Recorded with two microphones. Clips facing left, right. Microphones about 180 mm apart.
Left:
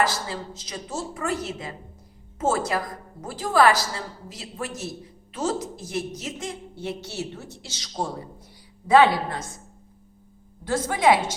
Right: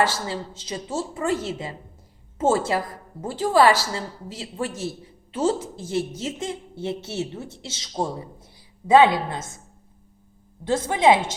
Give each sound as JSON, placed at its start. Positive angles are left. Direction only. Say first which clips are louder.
{"t": 0.0, "sound": "a woman's voice", "louder": "right 2 dB", "side_deg": -25}
{"t": 10.6, "sound": "a woman's voice", "louder": "right 2 dB", "side_deg": -25}